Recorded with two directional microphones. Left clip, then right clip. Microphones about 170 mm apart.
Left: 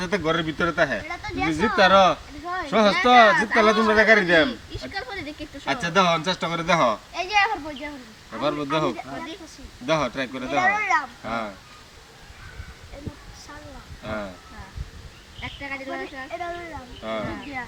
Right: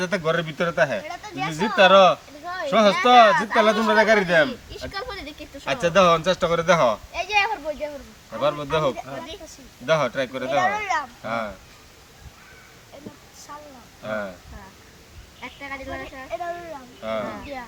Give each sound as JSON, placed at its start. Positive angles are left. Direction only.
{"t": 0.0, "sound": "speech", "side_deg": -30}
{"t": 14.0, "sound": "speech", "side_deg": -30}
{"t": 15.4, "sound": "speech", "side_deg": -25}